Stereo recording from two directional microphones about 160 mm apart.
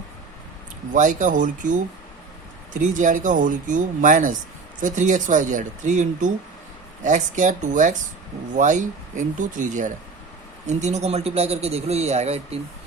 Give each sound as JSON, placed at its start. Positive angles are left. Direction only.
{"t": 0.9, "sound": "a man's voice", "side_deg": -55}